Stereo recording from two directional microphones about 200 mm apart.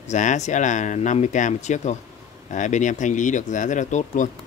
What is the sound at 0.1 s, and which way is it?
Speech, 35° left (ahead or behind).